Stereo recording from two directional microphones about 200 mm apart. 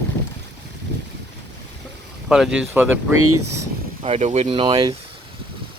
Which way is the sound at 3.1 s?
90° right.